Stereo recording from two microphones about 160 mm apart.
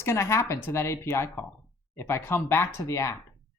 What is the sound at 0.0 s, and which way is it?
Speech, 15° left (ahead or behind).